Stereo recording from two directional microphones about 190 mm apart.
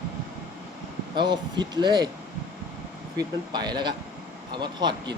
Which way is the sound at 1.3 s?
20° right (ahead or behind).